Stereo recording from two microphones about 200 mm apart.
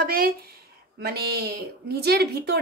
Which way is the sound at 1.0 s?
50° right (ahead or behind).